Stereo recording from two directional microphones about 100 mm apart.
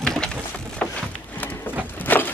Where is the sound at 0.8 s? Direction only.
20° left (ahead or behind).